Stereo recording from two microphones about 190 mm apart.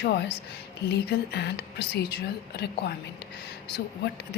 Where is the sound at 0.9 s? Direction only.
60° left (ahead or behind).